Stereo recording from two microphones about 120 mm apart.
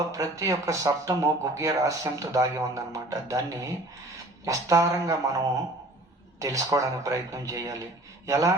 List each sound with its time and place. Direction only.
0.0 s speech: 30° right (ahead or behind)